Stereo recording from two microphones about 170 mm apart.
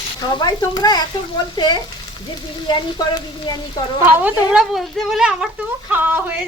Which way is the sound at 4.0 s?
10° right (ahead or behind).